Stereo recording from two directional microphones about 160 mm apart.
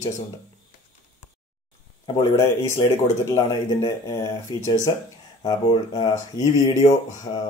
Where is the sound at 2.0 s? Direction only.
20° left (ahead or behind).